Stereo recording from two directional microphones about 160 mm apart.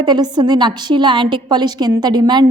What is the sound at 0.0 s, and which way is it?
A woman's voice, 25° right (ahead or behind).